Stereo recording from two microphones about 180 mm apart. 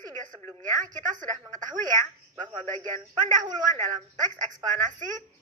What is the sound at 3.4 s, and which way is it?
Speech, 25° right (ahead or behind).